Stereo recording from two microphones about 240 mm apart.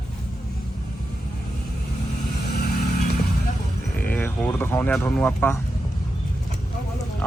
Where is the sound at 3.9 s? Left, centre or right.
Centre.